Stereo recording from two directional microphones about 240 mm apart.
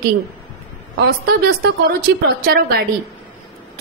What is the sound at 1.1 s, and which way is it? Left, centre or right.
A woman's voice, right.